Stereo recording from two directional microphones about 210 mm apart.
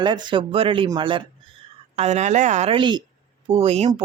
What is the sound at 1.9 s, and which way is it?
Speech, 35° right (ahead or behind).